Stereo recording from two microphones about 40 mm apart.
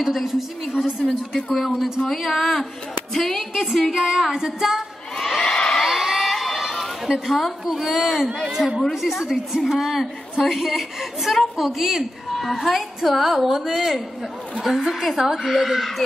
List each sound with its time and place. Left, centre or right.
0.0 s a woman's voice: centre
3.5 s a woman's voice: centre
3.9 s a woman's voice: centre
5.4 s crowd: left
5.9 s crowd: centre
7.6 s a woman's voice: centre
8.5 s a woman's voice: centre